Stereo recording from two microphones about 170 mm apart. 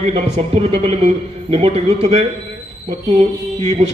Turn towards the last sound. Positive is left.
turn(degrees=-35)  # may be behind; listen again after turning